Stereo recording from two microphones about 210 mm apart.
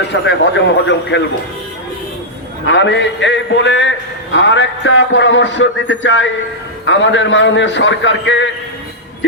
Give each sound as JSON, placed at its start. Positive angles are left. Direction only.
{"t": 0.1, "sound": "a man's voice", "side_deg": 60}
{"t": 2.6, "sound": "a man's voice", "side_deg": 60}